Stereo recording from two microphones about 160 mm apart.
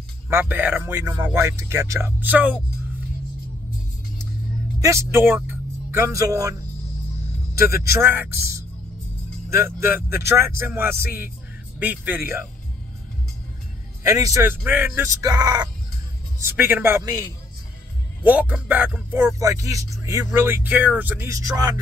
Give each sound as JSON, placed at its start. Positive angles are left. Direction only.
{"t": 0.3, "sound": "a man's voice", "side_deg": -10}
{"t": 4.7, "sound": "a man's voice", "side_deg": -20}
{"t": 7.5, "sound": "a man's voice", "side_deg": -15}
{"t": 14.0, "sound": "a man's voice", "side_deg": -20}
{"t": 18.2, "sound": "a man's voice", "side_deg": -10}
{"t": 19.4, "sound": "a man's voice", "side_deg": -20}